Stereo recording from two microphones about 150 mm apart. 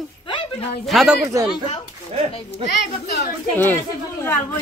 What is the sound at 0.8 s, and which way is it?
Speech, centre (ahead or behind).